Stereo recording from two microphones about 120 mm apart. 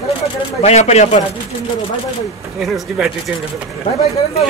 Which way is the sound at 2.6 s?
Centre (ahead or behind).